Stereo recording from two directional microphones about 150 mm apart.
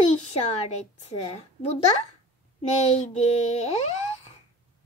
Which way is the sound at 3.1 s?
45° left (ahead or behind).